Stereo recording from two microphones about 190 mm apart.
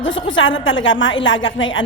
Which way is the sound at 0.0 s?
90° left.